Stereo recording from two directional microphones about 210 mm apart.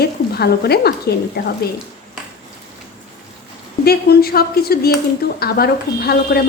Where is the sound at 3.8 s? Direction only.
45° left (ahead or behind).